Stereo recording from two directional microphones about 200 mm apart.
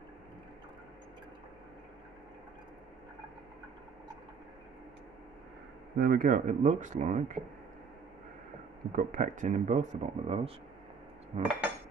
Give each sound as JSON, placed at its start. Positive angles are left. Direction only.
{"t": 5.9, "sound": "speech", "side_deg": -45}
{"t": 8.9, "sound": "speech", "side_deg": -40}